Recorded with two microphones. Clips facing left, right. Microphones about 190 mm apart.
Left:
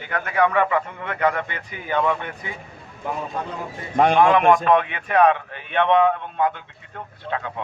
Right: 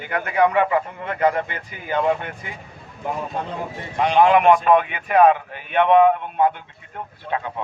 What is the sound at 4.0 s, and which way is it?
Speech, 50° left (ahead or behind).